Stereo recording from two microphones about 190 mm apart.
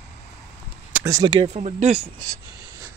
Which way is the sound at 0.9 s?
10° right (ahead or behind).